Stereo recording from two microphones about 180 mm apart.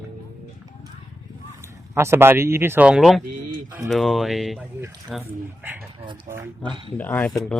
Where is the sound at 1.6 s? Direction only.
15° right (ahead or behind).